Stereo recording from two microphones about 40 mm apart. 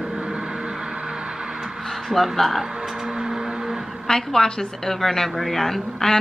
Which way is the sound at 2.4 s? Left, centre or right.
Centre.